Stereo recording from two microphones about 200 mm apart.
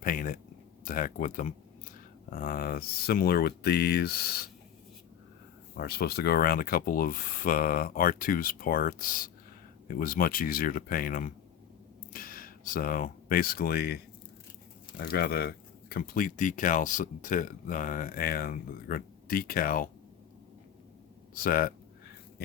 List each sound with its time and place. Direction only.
0.0 s speech: 45° left (ahead or behind)
5.7 s speech: 50° left (ahead or behind)
21.3 s speech: 45° left (ahead or behind)